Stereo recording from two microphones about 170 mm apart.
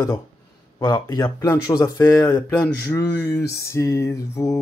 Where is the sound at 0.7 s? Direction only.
25° left (ahead or behind).